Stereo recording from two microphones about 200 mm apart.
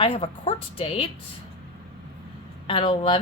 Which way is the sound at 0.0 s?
30° left (ahead or behind).